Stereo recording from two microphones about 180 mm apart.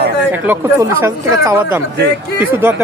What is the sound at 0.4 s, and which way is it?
Speech, 15° right (ahead or behind).